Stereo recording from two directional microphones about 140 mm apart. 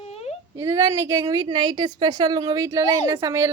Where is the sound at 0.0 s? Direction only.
45° left (ahead or behind).